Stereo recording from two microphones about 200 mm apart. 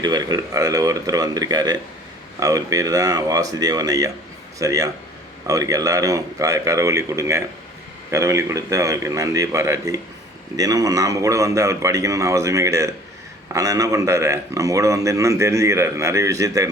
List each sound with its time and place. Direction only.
0.0 s a man's voice: 20° right (ahead or behind)